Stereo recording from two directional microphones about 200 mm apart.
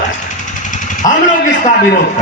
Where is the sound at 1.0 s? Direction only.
40° left (ahead or behind).